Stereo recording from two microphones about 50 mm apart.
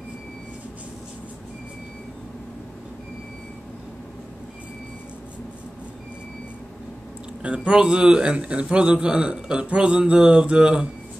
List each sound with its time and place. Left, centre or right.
7.4 s a man's voice: right